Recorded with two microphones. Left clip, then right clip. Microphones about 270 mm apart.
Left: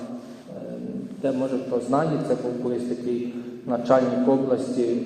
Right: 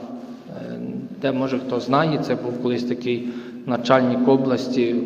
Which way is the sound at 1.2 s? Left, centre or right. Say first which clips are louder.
Right 2 dB; right.